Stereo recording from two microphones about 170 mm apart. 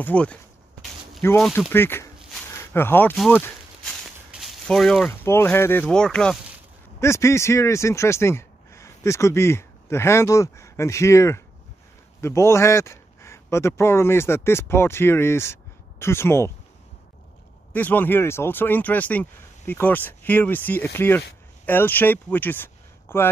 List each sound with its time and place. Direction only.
0.0 s speech: 5° left (ahead or behind)
4.3 s a sound: centre (ahead or behind)
5.2 s speech: 15° left (ahead or behind)
7.0 s a man's voice: 15° left (ahead or behind)
17.7 s speech: 10° left (ahead or behind)